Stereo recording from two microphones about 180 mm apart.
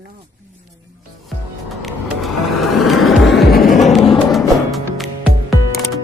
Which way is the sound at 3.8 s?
Centre (ahead or behind).